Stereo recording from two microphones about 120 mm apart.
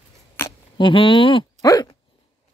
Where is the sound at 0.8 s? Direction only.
45° left (ahead or behind).